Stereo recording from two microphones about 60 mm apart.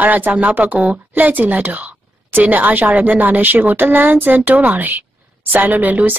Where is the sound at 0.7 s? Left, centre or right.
Centre.